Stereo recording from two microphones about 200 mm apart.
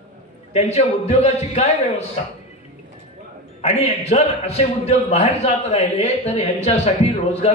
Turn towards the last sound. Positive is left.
turn(degrees=30)  # may be behind; listen again after turning